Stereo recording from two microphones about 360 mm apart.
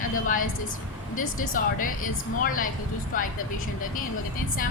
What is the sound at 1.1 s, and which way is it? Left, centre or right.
Speech, left.